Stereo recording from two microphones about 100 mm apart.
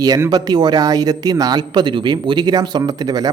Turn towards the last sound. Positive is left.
turn(degrees=-40)  # may be behind; listen again after turning